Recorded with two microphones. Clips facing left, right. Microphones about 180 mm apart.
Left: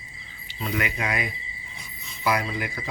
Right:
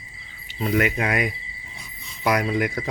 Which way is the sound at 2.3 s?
60° right (ahead or behind).